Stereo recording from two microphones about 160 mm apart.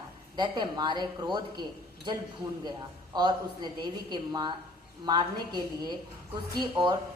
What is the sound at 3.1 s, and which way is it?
A woman's voice, 25° right (ahead or behind).